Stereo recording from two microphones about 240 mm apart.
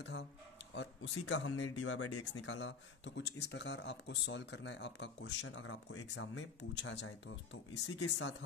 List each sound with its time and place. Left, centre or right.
0.0 s speech: left